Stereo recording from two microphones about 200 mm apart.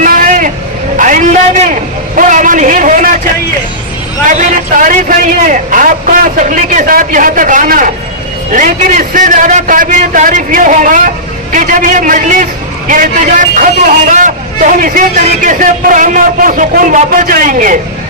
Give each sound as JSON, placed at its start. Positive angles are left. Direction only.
{"t": 0.0, "sound": "vehicle", "side_deg": -40}
{"t": 0.9, "sound": "a man's voice", "side_deg": -40}
{"t": 4.3, "sound": "a man's voice", "side_deg": -40}